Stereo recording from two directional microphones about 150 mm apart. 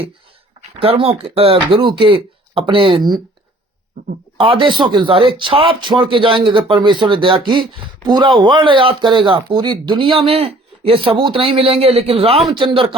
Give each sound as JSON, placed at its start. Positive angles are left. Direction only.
{"t": 0.8, "sound": "speech", "side_deg": -40}
{"t": 4.4, "sound": "speech", "side_deg": -35}